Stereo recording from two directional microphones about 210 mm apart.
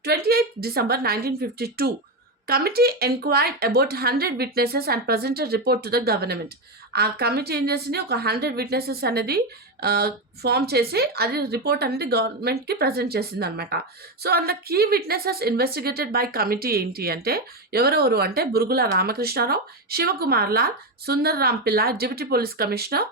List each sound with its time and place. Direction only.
0.0 s a woman's voice: 50° right (ahead or behind)